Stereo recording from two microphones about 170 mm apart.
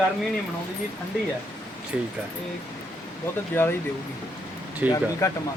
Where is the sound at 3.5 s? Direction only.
15° left (ahead or behind).